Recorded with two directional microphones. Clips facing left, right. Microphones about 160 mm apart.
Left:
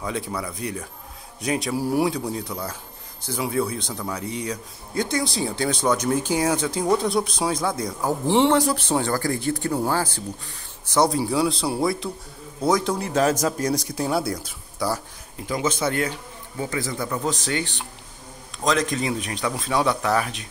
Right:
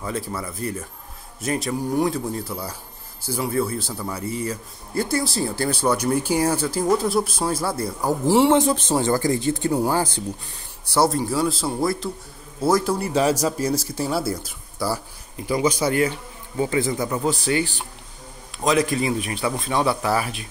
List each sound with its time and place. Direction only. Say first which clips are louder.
0.0 s speech: even; centre (ahead or behind)
2.1 s a man's voice: right 1 dB; centre (ahead or behind)
8.5 s speech: right 2 dB; 20° right (ahead or behind)
16.5 s speech: right 5 dB; 20° right (ahead or behind)
17.2 s speech: right 4 dB; 5° right (ahead or behind)